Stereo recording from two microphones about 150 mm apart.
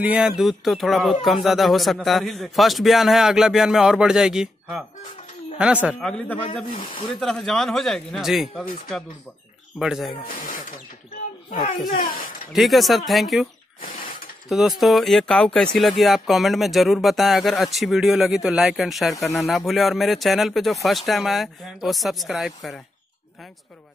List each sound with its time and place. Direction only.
0.0 s speech: 10° right (ahead or behind)
5.9 s speech: 5° left (ahead or behind)
11.9 s speech: 70° left (ahead or behind)
12.5 s speech: centre (ahead or behind)
13.7 s mechanisms: 70° left (ahead or behind)
14.5 s speech: centre (ahead or behind)